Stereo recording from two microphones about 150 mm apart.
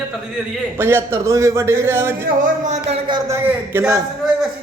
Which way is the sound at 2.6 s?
50° right (ahead or behind).